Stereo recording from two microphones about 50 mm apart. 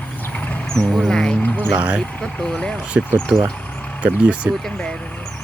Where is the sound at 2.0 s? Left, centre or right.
Left.